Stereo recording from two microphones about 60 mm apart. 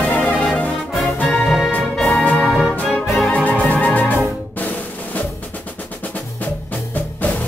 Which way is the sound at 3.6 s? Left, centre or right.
Left.